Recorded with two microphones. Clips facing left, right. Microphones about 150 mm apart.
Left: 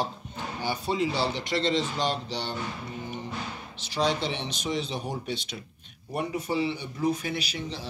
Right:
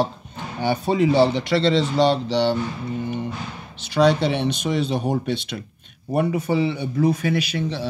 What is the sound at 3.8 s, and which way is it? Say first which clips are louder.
Speech: right 10 dB; 65° right (ahead or behind).